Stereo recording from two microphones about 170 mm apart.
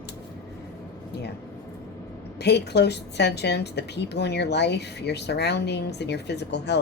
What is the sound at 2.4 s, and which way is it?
A woman's voice, 80° left.